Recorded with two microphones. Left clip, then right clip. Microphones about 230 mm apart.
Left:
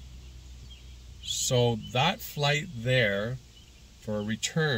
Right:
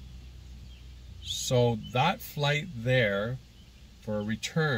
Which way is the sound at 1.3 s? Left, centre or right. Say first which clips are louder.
Even; centre.